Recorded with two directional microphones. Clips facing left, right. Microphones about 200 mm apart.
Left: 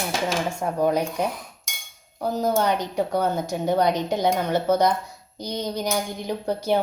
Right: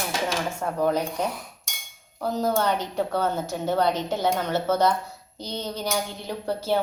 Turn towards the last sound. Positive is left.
turn(degrees=15)  # may be behind; listen again after turning